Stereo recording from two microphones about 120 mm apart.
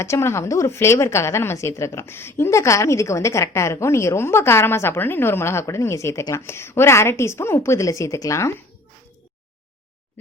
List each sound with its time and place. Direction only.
0.0 s a woman's voice: 25° left (ahead or behind)